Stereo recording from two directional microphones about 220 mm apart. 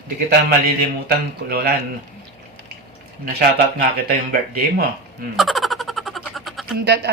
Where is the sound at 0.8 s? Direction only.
45° right (ahead or behind).